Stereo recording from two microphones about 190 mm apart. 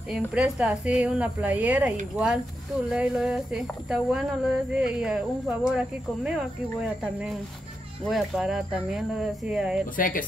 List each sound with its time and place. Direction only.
0.1 s a woman's voice: 5° right (ahead or behind)
9.9 s speech: 45° left (ahead or behind)